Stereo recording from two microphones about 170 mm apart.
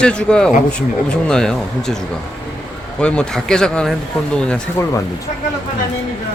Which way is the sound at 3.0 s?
5° left (ahead or behind).